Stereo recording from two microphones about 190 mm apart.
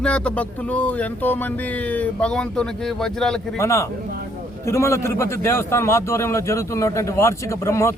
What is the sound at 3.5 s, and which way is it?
A man's voice, 15° left (ahead or behind).